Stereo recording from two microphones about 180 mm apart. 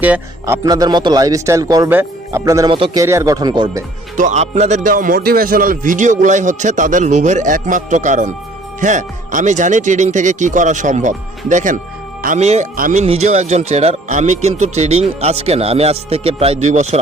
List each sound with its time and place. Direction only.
0.0 s a man's voice: 10° right (ahead or behind)
2.6 s a man's voice: 30° right (ahead or behind)
3.0 s speech: 15° right (ahead or behind)
4.2 s speech: 40° right (ahead or behind)